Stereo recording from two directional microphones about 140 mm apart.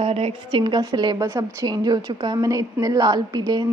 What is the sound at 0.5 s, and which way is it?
A woman's voice, 30° right (ahead or behind).